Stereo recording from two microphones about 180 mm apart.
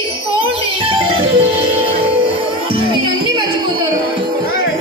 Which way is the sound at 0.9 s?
30° right (ahead or behind).